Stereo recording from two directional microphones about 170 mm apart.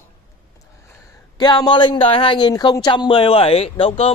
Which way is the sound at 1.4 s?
25° left (ahead or behind).